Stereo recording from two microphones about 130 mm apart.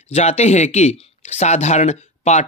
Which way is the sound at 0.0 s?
55° left (ahead or behind).